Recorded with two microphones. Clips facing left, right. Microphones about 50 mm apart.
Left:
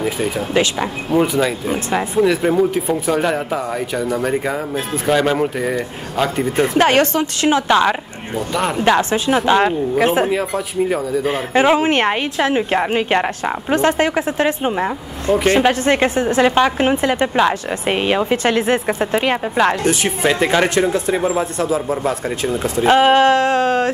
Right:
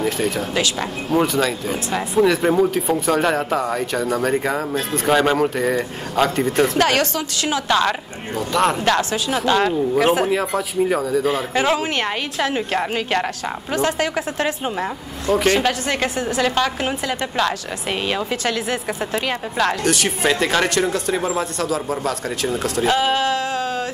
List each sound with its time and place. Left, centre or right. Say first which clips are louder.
0.0 s speech: left 1 dB; centre
2.1 s speech: even; centre
6.8 s a woman's voice: left 4 dB; left
8.4 s speech: right 1 dB; centre
9.4 s a woman's voice: even; centre
10.2 s speech: left 1 dB; centre
11.2 s a woman's voice: left 4 dB; centre
12.4 s a woman's voice: left 3 dB; left
19.5 s a woman's voice: left 1 dB; centre
22.8 s a sound: left 8 dB; left